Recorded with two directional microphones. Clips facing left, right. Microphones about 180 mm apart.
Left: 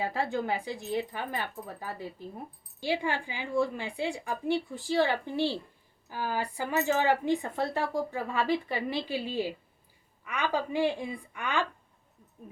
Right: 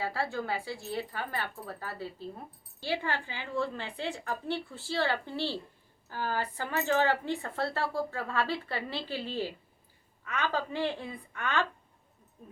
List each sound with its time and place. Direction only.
0.0 s speech: 20° left (ahead or behind)